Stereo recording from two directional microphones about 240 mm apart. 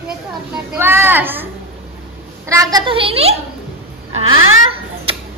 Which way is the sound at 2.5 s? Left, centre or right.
Centre.